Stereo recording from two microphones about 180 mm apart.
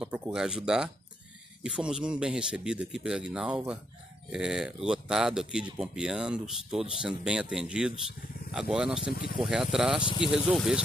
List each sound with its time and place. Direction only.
0.0 s speech: 5° right (ahead or behind)
10.0 s speech: 25° left (ahead or behind)
10.3 s speech: 5° right (ahead or behind)